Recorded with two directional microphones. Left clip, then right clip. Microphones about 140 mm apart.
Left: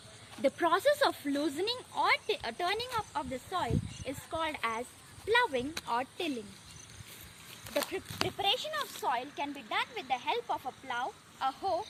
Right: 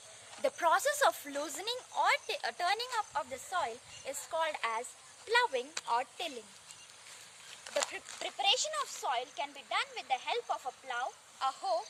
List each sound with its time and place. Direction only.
0.5 s speech: 5° right (ahead or behind); by 3.2 s 15° left (ahead or behind)
3.5 s speech: centre (ahead or behind)
5.3 s speech: 25° left (ahead or behind)
7.7 s speech: 35° left (ahead or behind)